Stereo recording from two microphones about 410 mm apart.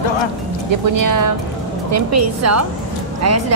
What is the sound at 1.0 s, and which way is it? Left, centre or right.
Speech, right.